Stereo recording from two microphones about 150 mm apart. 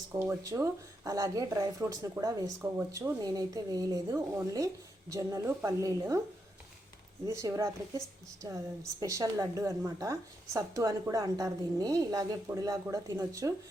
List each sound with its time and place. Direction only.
0.1 s speech: 15° right (ahead or behind)
7.3 s speech: 20° right (ahead or behind)